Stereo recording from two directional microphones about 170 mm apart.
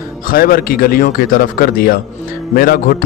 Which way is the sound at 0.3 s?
60° left (ahead or behind).